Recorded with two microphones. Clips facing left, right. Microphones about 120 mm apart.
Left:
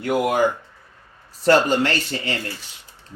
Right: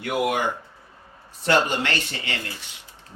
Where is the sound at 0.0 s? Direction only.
35° left (ahead or behind).